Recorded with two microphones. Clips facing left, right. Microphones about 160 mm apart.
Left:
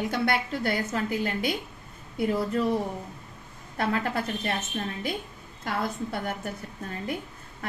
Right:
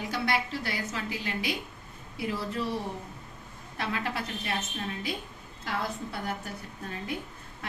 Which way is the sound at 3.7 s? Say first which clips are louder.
Left 5 dB; 50° left (ahead or behind).